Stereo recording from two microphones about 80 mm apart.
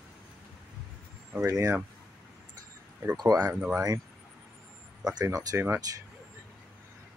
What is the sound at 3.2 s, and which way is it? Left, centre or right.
Speech, right.